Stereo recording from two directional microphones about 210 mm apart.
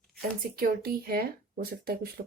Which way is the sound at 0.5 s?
45° right (ahead or behind).